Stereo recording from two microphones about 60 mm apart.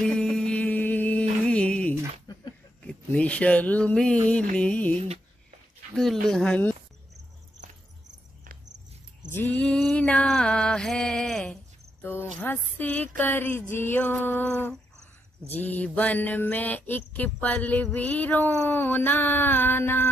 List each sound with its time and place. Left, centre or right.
0.0 s a sound: centre; by 1.2 s left
1.4 s music: centre
2.8 s speech: left
3.9 s mantra: centre
5.9 s speech: centre
9.5 s a sound: centre
10.2 s music: centre
12.0 s cricket: left
12.4 s speech: left
15.5 s mantra: left
17.9 s speech: left